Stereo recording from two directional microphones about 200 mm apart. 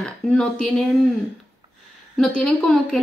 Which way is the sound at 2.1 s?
5° left (ahead or behind).